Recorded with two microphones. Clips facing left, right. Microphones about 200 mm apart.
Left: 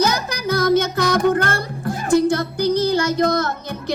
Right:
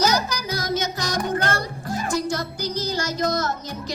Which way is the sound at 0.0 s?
55° left (ahead or behind).